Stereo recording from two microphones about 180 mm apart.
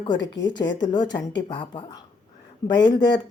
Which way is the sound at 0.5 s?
85° left.